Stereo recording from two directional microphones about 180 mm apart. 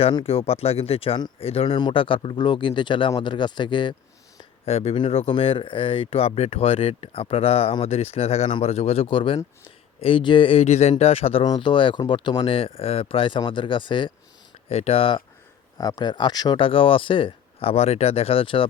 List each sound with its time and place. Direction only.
0.0 s speech: 30° left (ahead or behind)